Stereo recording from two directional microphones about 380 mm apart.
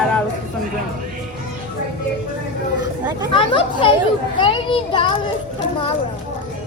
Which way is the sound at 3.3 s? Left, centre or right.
Centre.